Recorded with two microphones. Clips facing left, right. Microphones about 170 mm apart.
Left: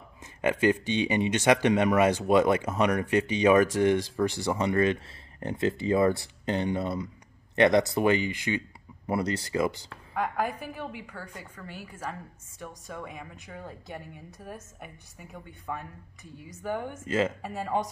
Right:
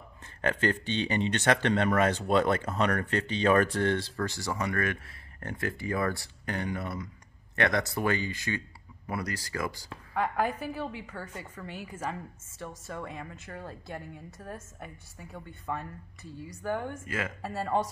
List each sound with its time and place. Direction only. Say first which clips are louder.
0.4 s speech: left 4 dB; 15° left (ahead or behind)
10.1 s a woman's voice: right 1 dB; 5° left (ahead or behind)
12.6 s speech: right 1 dB; 5° left (ahead or behind)
16.9 s speech: left 8 dB; 25° left (ahead or behind)